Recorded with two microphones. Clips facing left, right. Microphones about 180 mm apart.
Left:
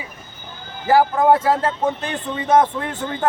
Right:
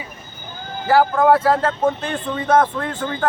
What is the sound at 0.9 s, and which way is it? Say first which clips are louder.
Speech: even; 15° left (ahead or behind).